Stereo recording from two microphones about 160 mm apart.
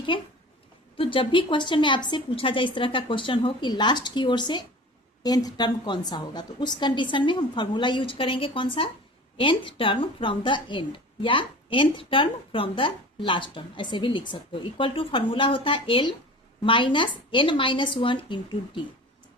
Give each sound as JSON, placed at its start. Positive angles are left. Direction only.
{"t": 0.9, "sound": "a woman's voice", "side_deg": 35}